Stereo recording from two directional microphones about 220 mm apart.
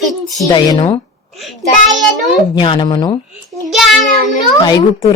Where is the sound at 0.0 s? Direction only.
Centre (ahead or behind).